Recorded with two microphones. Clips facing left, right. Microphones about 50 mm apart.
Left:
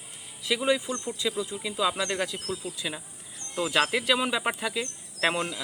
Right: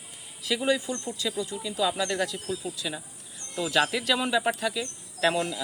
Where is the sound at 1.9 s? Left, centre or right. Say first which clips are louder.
Right 1 dB; centre.